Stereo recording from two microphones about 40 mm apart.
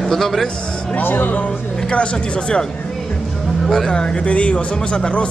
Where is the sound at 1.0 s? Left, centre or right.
Left.